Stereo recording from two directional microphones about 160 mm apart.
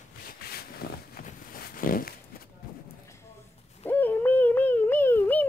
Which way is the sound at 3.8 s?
10° left (ahead or behind).